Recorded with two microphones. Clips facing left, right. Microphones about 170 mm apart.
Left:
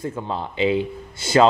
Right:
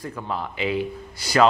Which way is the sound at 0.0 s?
25° left (ahead or behind).